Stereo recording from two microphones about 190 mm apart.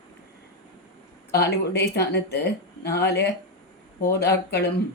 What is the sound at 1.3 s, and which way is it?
Speech, 60° left (ahead or behind).